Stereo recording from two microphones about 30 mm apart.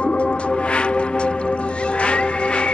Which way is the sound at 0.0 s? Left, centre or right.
Left.